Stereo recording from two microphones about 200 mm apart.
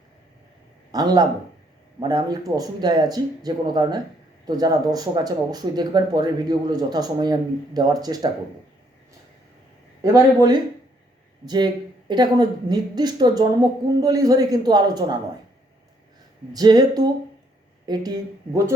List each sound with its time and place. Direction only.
0.9 s speech: 20° right (ahead or behind)
10.0 s speech: 15° right (ahead or behind)
16.5 s speech: 20° right (ahead or behind)